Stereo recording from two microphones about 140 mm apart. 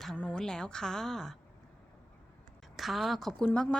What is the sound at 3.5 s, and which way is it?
Speech, 15° left (ahead or behind).